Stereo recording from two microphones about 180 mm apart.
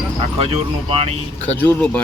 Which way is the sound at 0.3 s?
30° right (ahead or behind).